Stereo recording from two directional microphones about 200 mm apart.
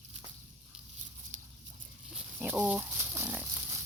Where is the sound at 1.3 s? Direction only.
35° right (ahead or behind).